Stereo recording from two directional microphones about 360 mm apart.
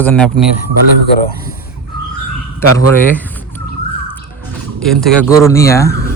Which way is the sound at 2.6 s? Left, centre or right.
Right.